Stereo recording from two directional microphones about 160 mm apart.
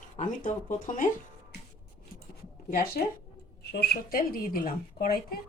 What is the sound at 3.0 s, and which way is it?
Speech, 70° left (ahead or behind).